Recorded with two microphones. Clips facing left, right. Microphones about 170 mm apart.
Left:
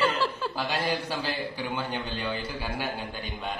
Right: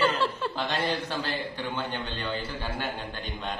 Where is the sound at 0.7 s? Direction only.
25° right (ahead or behind).